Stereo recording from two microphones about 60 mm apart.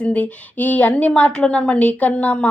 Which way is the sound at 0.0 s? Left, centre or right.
Left.